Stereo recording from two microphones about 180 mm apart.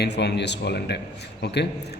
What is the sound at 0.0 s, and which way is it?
A man's voice, 70° left (ahead or behind).